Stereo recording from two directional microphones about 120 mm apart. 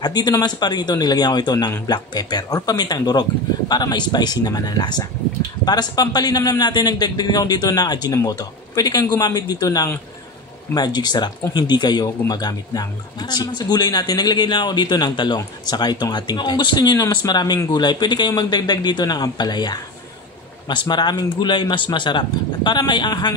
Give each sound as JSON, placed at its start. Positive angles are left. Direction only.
{"t": 0.0, "sound": "speech", "side_deg": 35}